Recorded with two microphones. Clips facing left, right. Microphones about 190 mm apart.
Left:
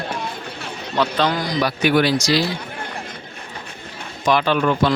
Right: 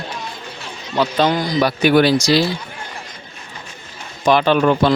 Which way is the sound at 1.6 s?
30° right (ahead or behind).